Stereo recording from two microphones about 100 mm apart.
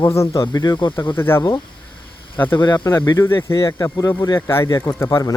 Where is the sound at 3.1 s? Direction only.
25° left (ahead or behind).